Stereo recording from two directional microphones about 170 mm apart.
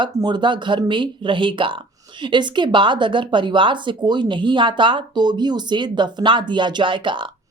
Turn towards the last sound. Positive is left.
turn(degrees=-30)  # may be behind; listen again after turning